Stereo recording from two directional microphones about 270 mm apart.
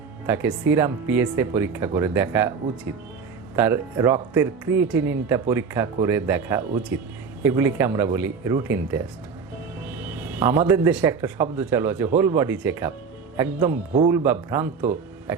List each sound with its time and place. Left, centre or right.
0.3 s speech: centre
3.5 s speech: centre